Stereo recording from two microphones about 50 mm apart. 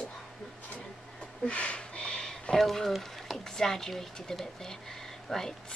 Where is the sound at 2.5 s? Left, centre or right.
Centre.